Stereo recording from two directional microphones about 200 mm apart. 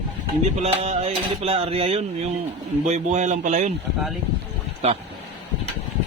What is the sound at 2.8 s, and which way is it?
Speech, 35° right (ahead or behind).